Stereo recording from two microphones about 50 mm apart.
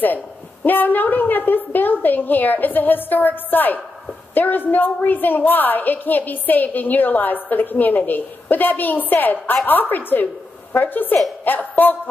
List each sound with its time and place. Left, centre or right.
0.7 s a woman's voice: left